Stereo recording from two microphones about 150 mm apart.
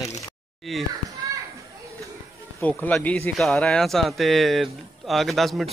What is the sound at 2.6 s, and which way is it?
A man's voice, 10° left (ahead or behind).